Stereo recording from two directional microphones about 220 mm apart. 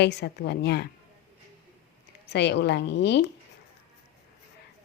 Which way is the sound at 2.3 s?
50° left (ahead or behind).